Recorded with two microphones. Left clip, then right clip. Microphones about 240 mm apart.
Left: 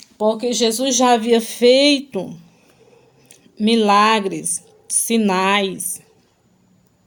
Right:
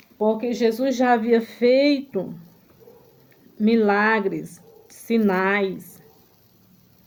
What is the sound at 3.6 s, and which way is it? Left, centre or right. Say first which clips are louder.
A woman's voice: left 5 dB; left.